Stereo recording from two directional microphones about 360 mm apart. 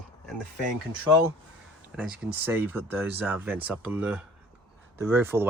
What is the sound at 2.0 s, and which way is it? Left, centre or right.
Speech, centre.